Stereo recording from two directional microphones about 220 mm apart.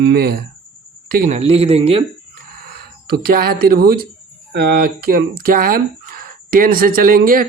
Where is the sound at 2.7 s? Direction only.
45° right (ahead or behind).